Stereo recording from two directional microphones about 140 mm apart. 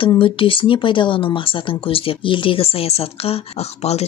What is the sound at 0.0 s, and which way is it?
Speech, 35° left (ahead or behind).